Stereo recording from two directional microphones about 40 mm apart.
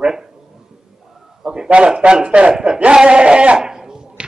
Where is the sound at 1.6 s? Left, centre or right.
Right.